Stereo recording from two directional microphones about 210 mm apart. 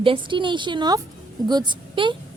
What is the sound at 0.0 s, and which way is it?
A woman's voice, 25° right (ahead or behind).